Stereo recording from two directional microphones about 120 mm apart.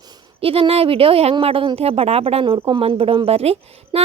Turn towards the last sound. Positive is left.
turn(degrees=-55)  # may be behind; listen again after turning